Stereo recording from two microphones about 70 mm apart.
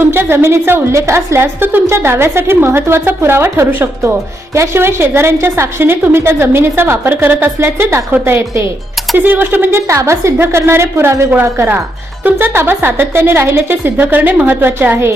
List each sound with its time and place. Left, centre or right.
0.0 s a woman's voice: right
9.1 s a woman's voice: right
9.9 s a woman's voice: right